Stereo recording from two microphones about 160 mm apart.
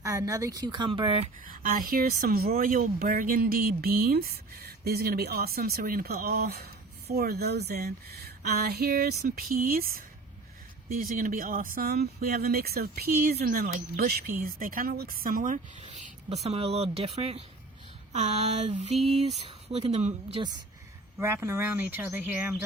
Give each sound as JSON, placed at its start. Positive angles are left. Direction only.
{"t": 0.0, "sound": "speech", "side_deg": -20}
{"t": 1.5, "sound": "speech", "side_deg": -60}
{"t": 11.0, "sound": "speech", "side_deg": -60}
{"t": 18.1, "sound": "a sound", "side_deg": -45}
{"t": 19.5, "sound": "speech", "side_deg": -40}
{"t": 21.2, "sound": "speech", "side_deg": -15}